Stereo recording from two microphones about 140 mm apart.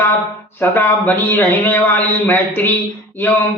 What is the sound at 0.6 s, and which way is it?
A man's voice, 15° left (ahead or behind).